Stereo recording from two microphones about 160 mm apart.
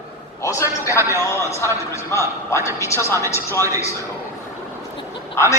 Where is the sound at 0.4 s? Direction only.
15° left (ahead or behind).